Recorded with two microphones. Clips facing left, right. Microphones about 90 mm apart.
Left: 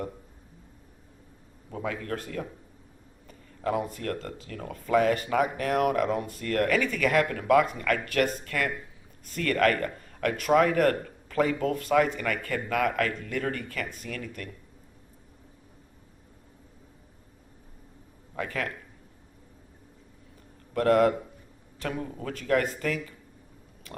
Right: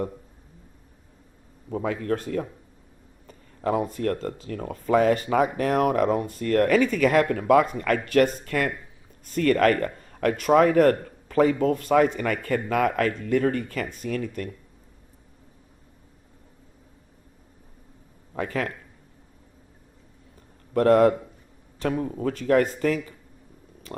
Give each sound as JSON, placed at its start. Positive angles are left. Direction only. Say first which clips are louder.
{"t": 1.7, "sound": "speech", "louder": "right 6 dB", "side_deg": -35}
{"t": 3.6, "sound": "speech", "louder": "right 5 dB", "side_deg": -35}
{"t": 18.3, "sound": "speech", "louder": "right 4 dB", "side_deg": -30}
{"t": 20.7, "sound": "speech", "louder": "right 4 dB", "side_deg": -35}